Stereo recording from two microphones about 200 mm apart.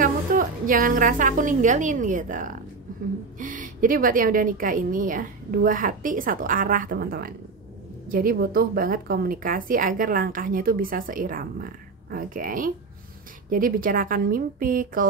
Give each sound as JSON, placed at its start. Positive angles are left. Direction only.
{"t": 0.0, "sound": "a woman's voice", "side_deg": -45}